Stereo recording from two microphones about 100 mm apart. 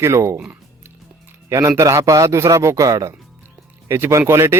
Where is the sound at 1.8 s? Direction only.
30° right (ahead or behind).